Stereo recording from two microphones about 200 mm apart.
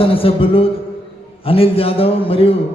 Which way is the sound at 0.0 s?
30° left (ahead or behind).